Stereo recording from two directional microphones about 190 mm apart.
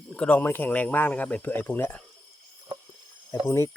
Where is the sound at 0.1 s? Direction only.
5° left (ahead or behind).